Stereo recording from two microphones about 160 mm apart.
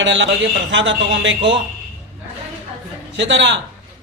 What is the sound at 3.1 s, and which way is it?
Speech, 90° right.